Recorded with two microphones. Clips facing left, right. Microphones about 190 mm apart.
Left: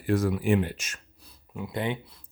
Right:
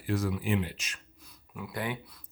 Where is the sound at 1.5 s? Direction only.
25° left (ahead or behind).